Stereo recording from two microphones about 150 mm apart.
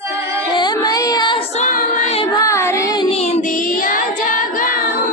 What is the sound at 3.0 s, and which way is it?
Child singing, 45° left (ahead or behind).